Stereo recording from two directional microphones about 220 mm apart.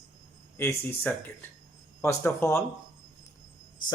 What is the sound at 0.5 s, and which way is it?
Speech, 10° left (ahead or behind).